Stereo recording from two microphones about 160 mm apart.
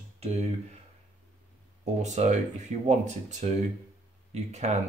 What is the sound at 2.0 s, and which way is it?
Speech, 45° right (ahead or behind).